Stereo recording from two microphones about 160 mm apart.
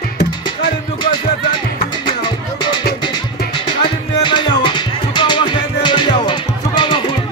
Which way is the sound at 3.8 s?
30° left (ahead or behind).